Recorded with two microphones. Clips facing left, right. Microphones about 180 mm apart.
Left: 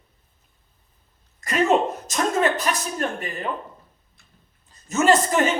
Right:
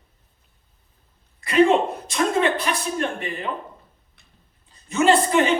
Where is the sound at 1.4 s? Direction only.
40° left (ahead or behind).